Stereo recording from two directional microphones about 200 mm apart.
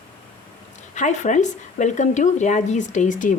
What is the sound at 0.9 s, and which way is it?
Speech, 35° left (ahead or behind).